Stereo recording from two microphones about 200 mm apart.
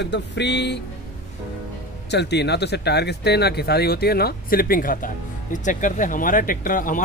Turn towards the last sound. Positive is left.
turn(degrees=40)  # may be behind; listen again after turning